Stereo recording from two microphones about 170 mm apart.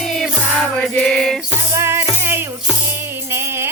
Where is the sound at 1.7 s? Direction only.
15° right (ahead or behind).